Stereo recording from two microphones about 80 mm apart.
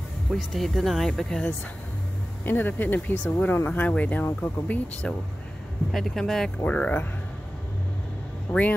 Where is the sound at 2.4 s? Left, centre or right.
Left.